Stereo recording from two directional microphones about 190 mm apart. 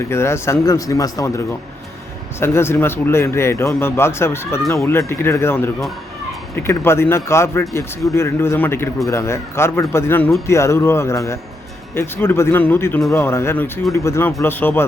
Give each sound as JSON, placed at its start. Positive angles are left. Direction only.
{"t": 0.1, "sound": "a man's voice", "side_deg": 15}